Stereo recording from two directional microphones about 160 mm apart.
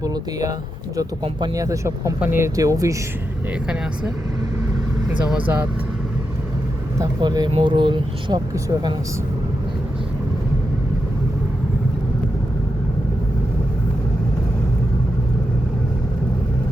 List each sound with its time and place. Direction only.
0.0 s a sound: 20° right (ahead or behind)
0.9 s speech: 25° right (ahead or behind)
7.0 s speech: 25° right (ahead or behind)